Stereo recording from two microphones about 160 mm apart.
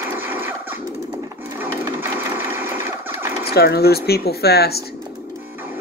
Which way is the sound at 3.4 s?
80° left.